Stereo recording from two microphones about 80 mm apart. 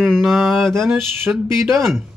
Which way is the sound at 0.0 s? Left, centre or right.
Centre.